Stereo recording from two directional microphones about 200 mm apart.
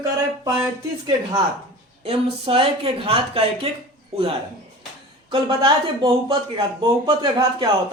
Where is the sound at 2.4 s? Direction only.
25° right (ahead or behind).